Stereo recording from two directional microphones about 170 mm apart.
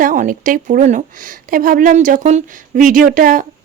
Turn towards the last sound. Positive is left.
turn(degrees=-50)  # may be behind; listen again after turning